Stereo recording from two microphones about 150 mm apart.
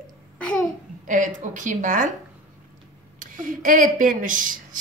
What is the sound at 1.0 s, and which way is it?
A woman's voice, 55° right (ahead or behind).